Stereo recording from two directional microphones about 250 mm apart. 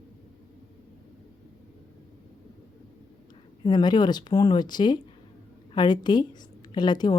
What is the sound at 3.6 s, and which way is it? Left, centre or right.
Speech, centre.